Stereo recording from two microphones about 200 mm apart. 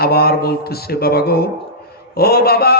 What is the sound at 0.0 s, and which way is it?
Speech, 50° left (ahead or behind).